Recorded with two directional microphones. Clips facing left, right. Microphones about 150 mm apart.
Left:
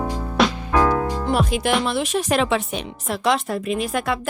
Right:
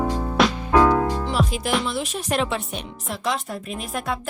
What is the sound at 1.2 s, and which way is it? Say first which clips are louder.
Music: left 3 dB; 50° left (ahead or behind).